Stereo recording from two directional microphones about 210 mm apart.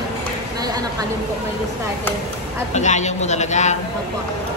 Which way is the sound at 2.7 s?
35° left (ahead or behind).